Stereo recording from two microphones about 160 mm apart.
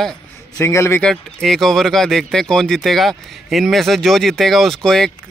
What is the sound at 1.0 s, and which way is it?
Speech, centre (ahead or behind).